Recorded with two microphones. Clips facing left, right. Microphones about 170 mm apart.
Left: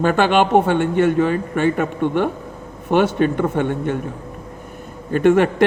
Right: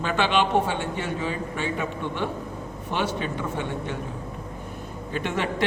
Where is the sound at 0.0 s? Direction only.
50° left (ahead or behind).